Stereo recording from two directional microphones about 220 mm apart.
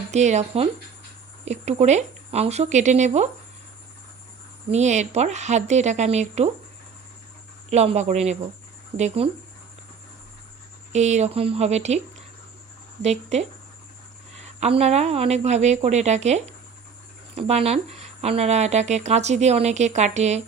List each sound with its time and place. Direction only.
0.1 s speech: 30° right (ahead or behind)
4.7 s speech: 30° right (ahead or behind)
7.7 s speech: 30° right (ahead or behind)
10.9 s speech: 30° right (ahead or behind)
13.0 s speech: 30° right (ahead or behind)
14.6 s speech: 30° right (ahead or behind)